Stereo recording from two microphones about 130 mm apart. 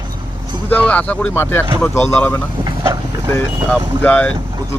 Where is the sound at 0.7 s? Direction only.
10° left (ahead or behind).